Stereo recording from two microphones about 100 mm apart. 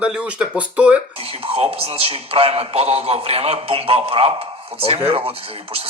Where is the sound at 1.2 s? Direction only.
80° right.